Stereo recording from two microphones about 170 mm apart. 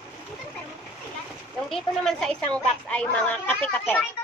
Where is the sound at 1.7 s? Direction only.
Centre (ahead or behind).